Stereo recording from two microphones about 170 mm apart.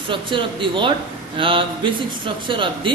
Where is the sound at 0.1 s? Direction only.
30° right (ahead or behind).